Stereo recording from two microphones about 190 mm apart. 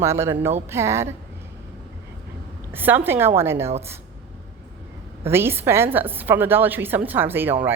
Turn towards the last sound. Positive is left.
turn(degrees=-10)  # may be behind; listen again after turning